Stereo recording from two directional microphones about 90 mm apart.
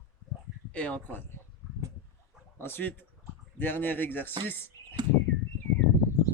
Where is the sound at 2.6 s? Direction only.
25° left (ahead or behind).